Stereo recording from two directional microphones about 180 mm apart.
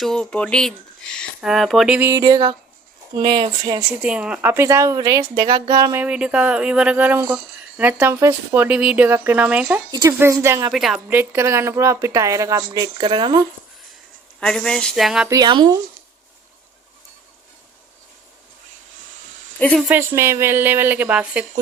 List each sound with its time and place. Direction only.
0.0 s speech: 5° left (ahead or behind)
2.0 s speech: 15° right (ahead or behind)
4.0 s speech: 5° right (ahead or behind); by 6.0 s 20° right (ahead or behind)
6.0 s speech: 5° right (ahead or behind)
10.7 s speech: centre (ahead or behind); by 13.4 s 25° right (ahead or behind)
14.4 s speech: 5° left (ahead or behind)
15.3 s speech: 25° right (ahead or behind)
19.5 s speech: 10° left (ahead or behind)
19.9 s speech: 15° right (ahead or behind)